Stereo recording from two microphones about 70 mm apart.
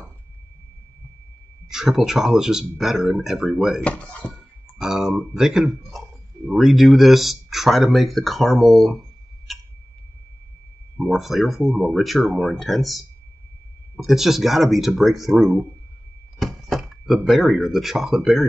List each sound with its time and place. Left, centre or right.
1.7 s speech: centre
3.8 s speech: centre
4.3 s speech: centre
11.0 s speech: centre